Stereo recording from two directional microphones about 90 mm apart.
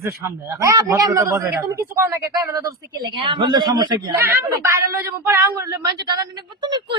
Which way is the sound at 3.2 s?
65° right (ahead or behind).